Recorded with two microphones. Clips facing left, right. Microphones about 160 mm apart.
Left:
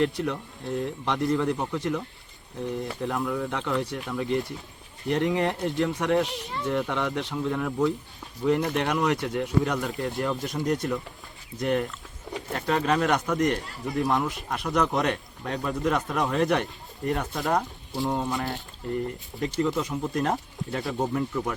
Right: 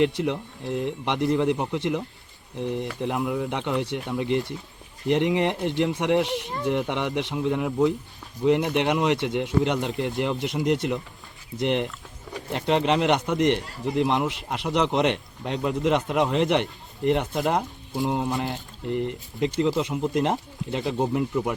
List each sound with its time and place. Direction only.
0.2 s speech: 20° right (ahead or behind)